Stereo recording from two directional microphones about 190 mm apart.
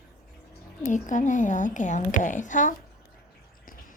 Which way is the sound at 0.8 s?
40° left (ahead or behind).